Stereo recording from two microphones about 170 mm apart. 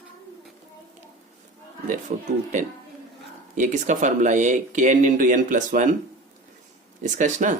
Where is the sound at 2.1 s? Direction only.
45° right (ahead or behind).